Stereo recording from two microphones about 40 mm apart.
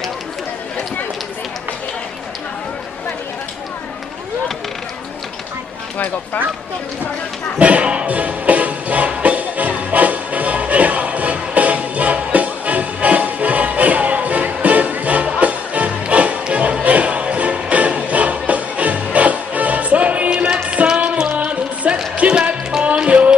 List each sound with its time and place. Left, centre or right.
7.5 s music: right